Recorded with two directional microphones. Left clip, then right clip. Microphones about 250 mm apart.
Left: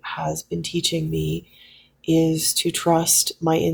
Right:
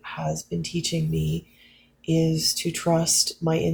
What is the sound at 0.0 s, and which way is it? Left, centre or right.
Speech, left.